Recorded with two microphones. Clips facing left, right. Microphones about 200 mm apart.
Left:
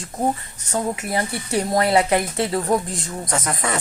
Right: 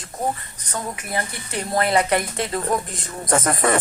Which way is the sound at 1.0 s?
80° left.